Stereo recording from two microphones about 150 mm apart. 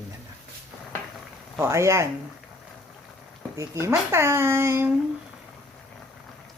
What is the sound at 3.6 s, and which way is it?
Speech, 20° right (ahead or behind).